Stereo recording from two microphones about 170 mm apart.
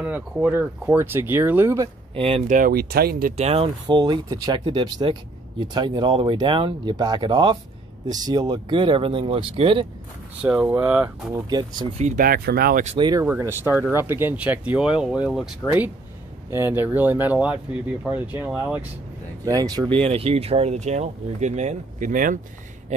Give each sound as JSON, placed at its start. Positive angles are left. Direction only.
{"t": 0.0, "sound": "speech", "side_deg": -10}
{"t": 2.1, "sound": "speech", "side_deg": -35}
{"t": 2.4, "sound": "speech", "side_deg": -50}
{"t": 3.3, "sound": "speech", "side_deg": -35}
{"t": 3.8, "sound": "speech", "side_deg": -25}
{"t": 10.4, "sound": "speech", "side_deg": -10}
{"t": 11.3, "sound": "speech", "side_deg": -25}
{"t": 12.0, "sound": "speech", "side_deg": -45}
{"t": 12.3, "sound": "speech", "side_deg": -60}
{"t": 12.8, "sound": "speech", "side_deg": -30}
{"t": 13.2, "sound": "speech", "side_deg": -15}
{"t": 19.4, "sound": "speech", "side_deg": -20}
{"t": 20.0, "sound": "speech", "side_deg": -35}